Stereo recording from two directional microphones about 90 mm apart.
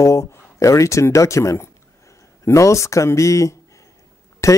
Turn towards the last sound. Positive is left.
turn(degrees=35)  # may be behind; listen again after turning